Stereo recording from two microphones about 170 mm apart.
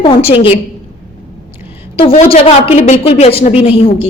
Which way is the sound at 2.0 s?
35° left (ahead or behind).